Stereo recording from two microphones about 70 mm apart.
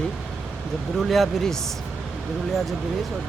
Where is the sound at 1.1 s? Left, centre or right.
Centre.